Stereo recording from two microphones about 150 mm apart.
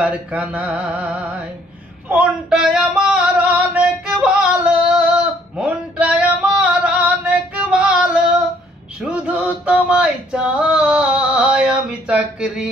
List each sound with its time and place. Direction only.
0.0 s mantra: 10° right (ahead or behind)
2.0 s a sound: 5° right (ahead or behind)
9.0 s music: 10° right (ahead or behind)